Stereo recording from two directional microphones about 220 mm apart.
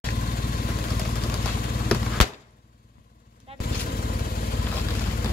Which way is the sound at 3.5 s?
25° right (ahead or behind).